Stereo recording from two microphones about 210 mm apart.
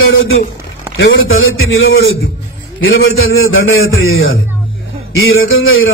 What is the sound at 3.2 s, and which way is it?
A man's voice, 75° left (ahead or behind).